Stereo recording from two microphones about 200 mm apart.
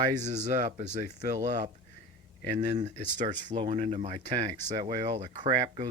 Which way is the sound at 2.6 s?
20° right (ahead or behind).